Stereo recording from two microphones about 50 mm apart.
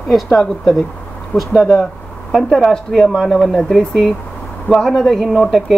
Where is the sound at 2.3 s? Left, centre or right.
Centre.